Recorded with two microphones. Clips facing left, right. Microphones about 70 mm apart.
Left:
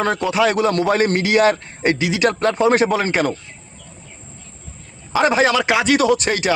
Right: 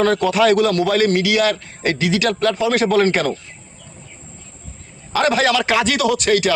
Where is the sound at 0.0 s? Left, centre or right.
Centre.